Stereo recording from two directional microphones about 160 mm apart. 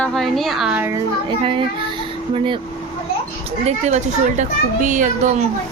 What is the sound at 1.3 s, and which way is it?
A woman's voice, 30° right (ahead or behind).